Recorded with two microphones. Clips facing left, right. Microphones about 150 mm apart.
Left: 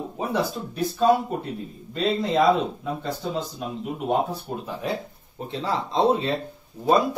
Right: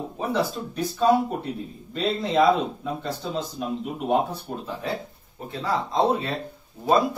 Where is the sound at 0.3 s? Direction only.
Centre (ahead or behind).